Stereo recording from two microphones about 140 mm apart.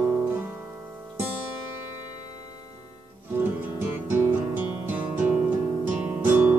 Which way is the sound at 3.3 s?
15° right (ahead or behind).